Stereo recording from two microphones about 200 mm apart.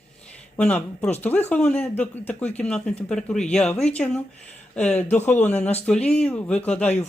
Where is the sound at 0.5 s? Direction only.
5° left (ahead or behind).